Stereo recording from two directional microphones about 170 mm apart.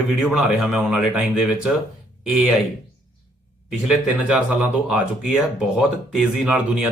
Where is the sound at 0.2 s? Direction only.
Centre (ahead or behind).